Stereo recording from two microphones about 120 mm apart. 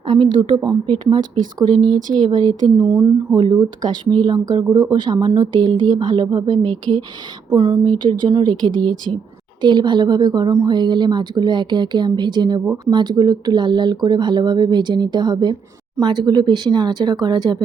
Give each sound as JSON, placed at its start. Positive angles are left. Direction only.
{"t": 0.1, "sound": "speech", "side_deg": -50}
{"t": 2.6, "sound": "speech", "side_deg": -50}
{"t": 3.3, "sound": "speech", "side_deg": -35}